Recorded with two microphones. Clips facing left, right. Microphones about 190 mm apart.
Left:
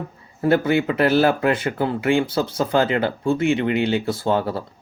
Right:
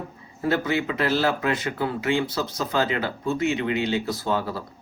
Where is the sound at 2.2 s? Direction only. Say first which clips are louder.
Left 5 dB; 30° left (ahead or behind).